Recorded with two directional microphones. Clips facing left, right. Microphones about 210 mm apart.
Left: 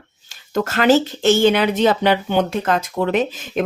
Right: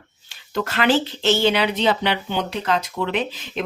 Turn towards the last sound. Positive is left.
turn(degrees=45)  # may be behind; listen again after turning